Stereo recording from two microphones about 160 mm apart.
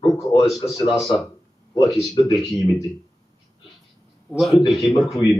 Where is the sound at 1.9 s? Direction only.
Centre (ahead or behind).